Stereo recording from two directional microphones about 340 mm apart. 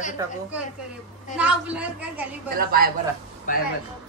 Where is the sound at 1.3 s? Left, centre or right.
Centre.